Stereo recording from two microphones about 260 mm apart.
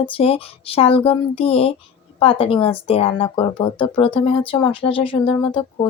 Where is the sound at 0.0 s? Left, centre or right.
Left.